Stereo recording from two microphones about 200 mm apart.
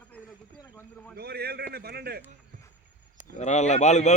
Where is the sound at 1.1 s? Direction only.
50° right (ahead or behind).